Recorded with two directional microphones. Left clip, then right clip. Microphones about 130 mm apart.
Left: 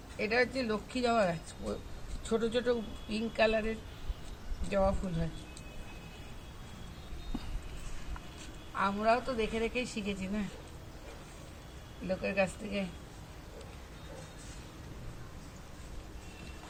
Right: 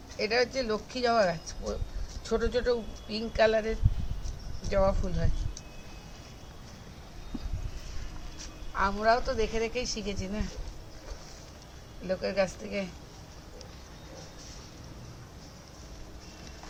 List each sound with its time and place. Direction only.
0.2 s speech: 20° right (ahead or behind)
4.7 s a woman's voice: 20° right (ahead or behind)
8.7 s a woman's voice: 15° right (ahead or behind)
12.0 s speech: 25° right (ahead or behind)